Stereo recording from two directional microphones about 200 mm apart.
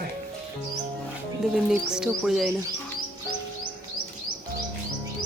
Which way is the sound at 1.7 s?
5° right (ahead or behind).